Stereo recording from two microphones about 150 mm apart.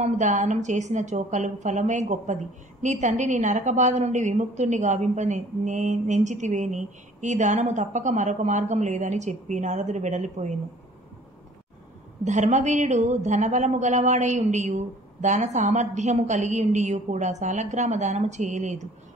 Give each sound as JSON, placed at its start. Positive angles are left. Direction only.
{"t": 0.0, "sound": "a woman's voice", "side_deg": -55}
{"t": 12.3, "sound": "a woman's voice", "side_deg": -50}